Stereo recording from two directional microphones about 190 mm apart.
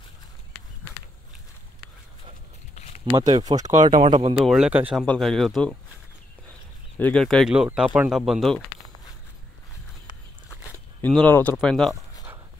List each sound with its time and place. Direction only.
2.7 s a sound: 35° left (ahead or behind)
3.1 s speech: 20° right (ahead or behind)
4.0 s speech: 30° right (ahead or behind)
4.4 s speech: 5° right (ahead or behind)
5.0 s speech: 5° left (ahead or behind)
7.0 s speech: 5° left (ahead or behind)
11.0 s speech: 5° left (ahead or behind)